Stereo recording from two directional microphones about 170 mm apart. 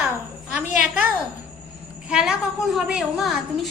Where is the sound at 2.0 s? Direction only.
5° right (ahead or behind).